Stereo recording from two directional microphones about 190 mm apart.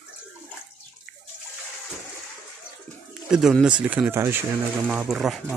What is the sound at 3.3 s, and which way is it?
Speech, 5° right (ahead or behind).